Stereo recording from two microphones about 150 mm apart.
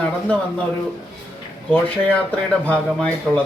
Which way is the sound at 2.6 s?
5° left (ahead or behind).